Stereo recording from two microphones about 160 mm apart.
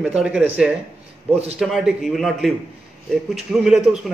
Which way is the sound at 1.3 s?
40° right (ahead or behind).